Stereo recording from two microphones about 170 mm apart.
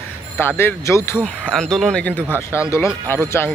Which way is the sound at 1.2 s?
5° left (ahead or behind).